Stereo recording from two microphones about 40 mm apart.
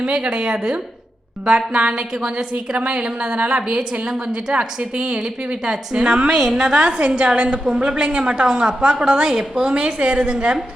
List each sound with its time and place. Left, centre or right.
0.0 s a woman's voice: right
3.3 s a woman's voice: right
5.6 s a woman's voice: centre
6.0 s a woman's voice: right
9.7 s a woman's voice: right